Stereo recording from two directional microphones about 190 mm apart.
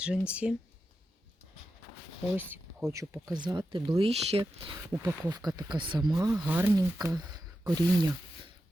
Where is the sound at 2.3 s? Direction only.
10° right (ahead or behind); by 4.7 s 30° right (ahead or behind).